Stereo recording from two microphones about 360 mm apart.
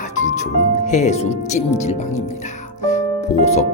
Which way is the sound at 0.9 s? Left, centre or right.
Centre.